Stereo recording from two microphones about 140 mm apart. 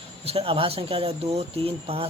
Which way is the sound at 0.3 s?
45° right (ahead or behind).